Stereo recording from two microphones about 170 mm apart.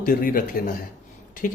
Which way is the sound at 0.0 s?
55° left (ahead or behind).